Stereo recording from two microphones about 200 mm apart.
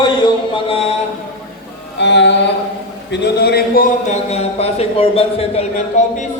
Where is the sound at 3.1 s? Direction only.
55° left (ahead or behind); by 6.3 s 35° left (ahead or behind).